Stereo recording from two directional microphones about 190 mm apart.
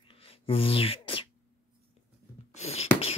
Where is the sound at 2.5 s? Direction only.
35° left (ahead or behind).